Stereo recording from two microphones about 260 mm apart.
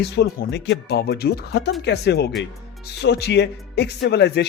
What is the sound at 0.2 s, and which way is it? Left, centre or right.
Speech, left.